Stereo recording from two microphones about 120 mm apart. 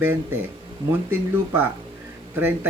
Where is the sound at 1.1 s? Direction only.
20° right (ahead or behind).